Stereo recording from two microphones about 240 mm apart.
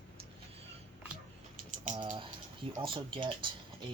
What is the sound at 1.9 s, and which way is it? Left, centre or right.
Speech, centre.